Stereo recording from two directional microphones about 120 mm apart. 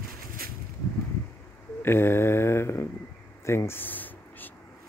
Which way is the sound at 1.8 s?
20° left (ahead or behind).